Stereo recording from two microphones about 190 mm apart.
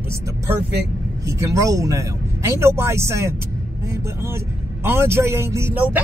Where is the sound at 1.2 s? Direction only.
15° right (ahead or behind).